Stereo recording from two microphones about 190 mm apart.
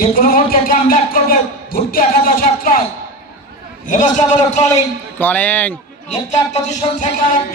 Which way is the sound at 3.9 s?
40° left (ahead or behind).